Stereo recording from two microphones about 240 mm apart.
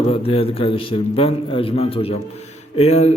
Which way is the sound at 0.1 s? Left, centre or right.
Left.